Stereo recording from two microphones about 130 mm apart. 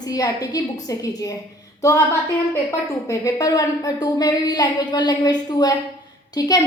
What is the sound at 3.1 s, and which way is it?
A woman's voice, 25° left (ahead or behind).